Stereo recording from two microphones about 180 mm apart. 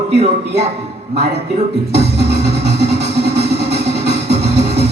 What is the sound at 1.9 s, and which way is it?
Music, 65° right (ahead or behind).